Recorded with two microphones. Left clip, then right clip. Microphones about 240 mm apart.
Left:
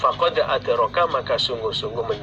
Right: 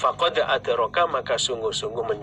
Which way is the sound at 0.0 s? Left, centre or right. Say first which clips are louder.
Left 2 dB; right.